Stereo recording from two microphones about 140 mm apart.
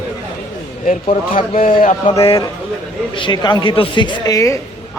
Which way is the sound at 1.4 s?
40° left (ahead or behind).